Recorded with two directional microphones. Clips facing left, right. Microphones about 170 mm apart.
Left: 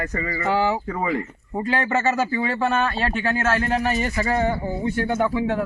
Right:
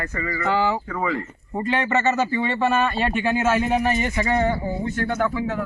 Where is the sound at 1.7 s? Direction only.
Centre (ahead or behind).